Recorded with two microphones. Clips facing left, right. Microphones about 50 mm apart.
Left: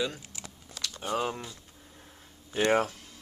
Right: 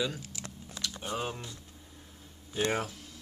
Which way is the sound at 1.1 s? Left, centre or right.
Left.